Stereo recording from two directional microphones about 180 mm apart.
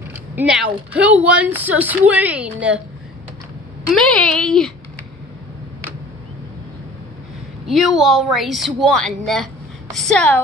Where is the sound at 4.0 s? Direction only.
5° left (ahead or behind).